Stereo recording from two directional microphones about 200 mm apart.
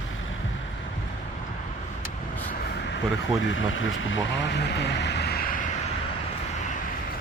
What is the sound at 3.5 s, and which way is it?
Speech, 75° left (ahead or behind).